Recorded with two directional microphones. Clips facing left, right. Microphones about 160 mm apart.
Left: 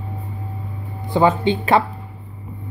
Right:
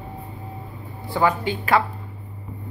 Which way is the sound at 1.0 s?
20° left (ahead or behind).